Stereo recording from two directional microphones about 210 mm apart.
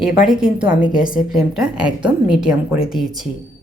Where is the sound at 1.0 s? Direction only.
40° left (ahead or behind).